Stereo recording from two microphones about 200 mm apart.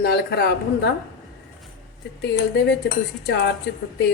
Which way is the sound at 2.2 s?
60° left (ahead or behind).